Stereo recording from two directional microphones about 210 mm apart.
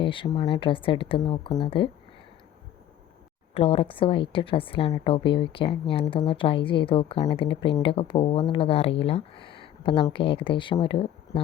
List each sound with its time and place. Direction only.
0.0 s a woman's voice: 25° left (ahead or behind)
3.5 s a woman's voice: 25° left (ahead or behind)